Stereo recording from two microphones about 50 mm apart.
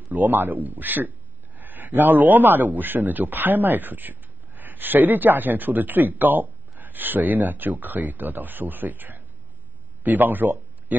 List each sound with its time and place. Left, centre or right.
0.1 s a man's voice: right